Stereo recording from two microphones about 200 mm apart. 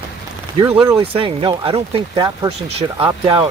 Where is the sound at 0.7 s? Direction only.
15° right (ahead or behind).